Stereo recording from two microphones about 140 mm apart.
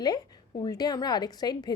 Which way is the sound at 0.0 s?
30° left (ahead or behind).